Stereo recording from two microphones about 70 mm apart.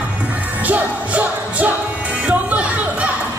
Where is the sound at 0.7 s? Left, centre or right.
Right.